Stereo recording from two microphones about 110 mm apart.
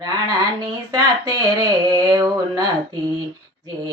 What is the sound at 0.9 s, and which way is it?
Mantra, 35° right (ahead or behind).